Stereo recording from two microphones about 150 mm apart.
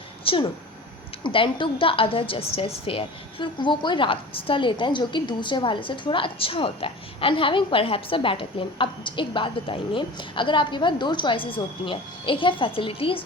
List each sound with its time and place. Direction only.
0.3 s a woman's voice: 35° left (ahead or behind)